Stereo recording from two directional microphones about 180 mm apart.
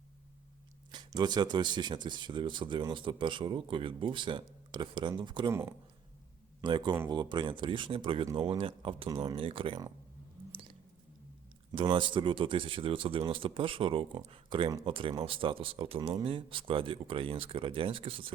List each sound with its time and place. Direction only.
0.9 s speech: 25° right (ahead or behind)
6.6 s speech: 25° right (ahead or behind)
11.8 s speech: 25° right (ahead or behind)